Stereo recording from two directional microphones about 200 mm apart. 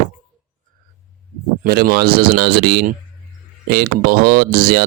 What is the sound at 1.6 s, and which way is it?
Speech, 50° right (ahead or behind).